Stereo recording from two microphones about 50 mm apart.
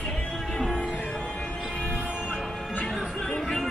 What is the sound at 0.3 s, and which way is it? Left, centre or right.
Music, centre.